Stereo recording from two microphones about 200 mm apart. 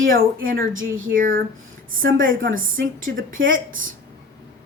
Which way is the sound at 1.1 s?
45° right (ahead or behind).